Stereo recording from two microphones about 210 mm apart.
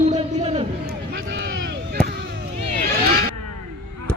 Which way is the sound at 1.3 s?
60° right (ahead or behind).